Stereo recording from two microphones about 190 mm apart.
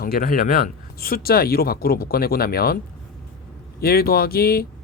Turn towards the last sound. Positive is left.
turn(degrees=55)  # may be behind; listen again after turning